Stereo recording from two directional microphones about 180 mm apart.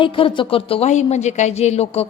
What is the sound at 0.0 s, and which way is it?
A woman's voice, 30° left (ahead or behind).